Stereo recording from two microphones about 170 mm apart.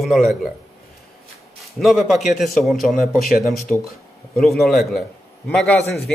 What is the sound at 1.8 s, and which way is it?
A man's voice, centre (ahead or behind).